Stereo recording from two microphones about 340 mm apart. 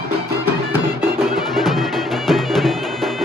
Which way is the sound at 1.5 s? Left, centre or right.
Centre.